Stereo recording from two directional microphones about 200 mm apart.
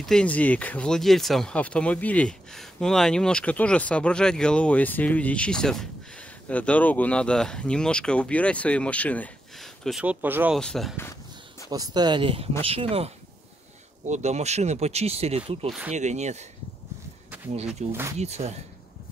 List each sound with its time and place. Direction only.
0.0 s speech: 5° left (ahead or behind)
10.6 s speech: centre (ahead or behind)
11.7 s speech: 20° right (ahead or behind); by 16.4 s 35° right (ahead or behind)
17.8 s speech: 35° right (ahead or behind)